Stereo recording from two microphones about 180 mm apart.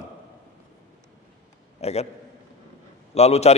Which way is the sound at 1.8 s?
35° left (ahead or behind).